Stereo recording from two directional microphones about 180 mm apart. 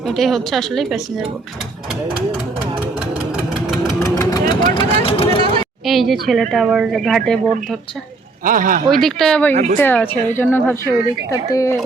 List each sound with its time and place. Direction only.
0.0 s speech: centre (ahead or behind)
4.1 s vehicle: 20° left (ahead or behind)
4.7 s speech: 30° left (ahead or behind)
5.8 s speech: centre (ahead or behind)
8.4 s speech: 50° right (ahead or behind)
8.9 s a woman's voice: centre (ahead or behind)